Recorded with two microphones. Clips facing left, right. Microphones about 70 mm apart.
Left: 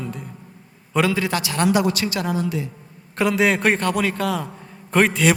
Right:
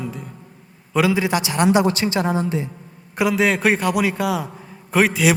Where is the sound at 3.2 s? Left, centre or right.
Centre.